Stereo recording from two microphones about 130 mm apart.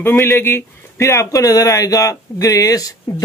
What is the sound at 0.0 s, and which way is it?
Speech, 20° left (ahead or behind).